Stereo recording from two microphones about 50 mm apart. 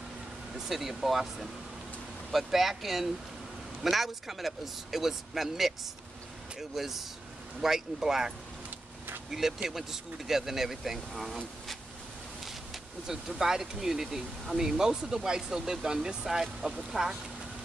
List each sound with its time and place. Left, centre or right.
0.7 s speech: centre
8.6 s vehicle: right
9.3 s speech: centre
13.0 s speech: centre